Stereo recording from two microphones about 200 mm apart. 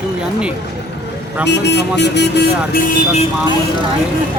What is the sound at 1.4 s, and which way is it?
Speech, 60° left (ahead or behind).